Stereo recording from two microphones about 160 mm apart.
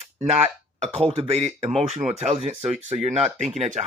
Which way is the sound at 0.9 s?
40° right (ahead or behind).